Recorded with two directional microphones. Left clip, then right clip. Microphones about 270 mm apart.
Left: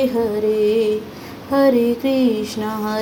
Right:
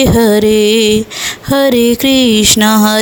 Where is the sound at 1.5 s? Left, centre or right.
Right.